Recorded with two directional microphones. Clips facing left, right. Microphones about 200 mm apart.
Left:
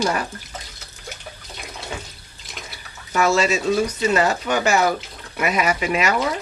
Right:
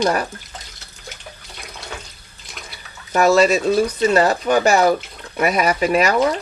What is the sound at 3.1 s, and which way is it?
Speech, 35° right (ahead or behind).